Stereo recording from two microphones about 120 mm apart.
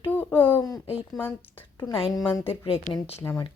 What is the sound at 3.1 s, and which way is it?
Speech, 20° left (ahead or behind).